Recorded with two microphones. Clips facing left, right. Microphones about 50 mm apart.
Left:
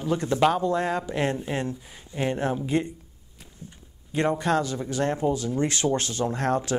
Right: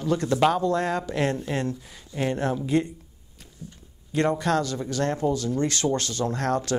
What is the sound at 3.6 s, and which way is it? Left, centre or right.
Speech, left.